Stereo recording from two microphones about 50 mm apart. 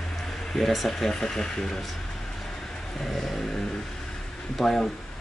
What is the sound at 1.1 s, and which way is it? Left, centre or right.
Speech, centre.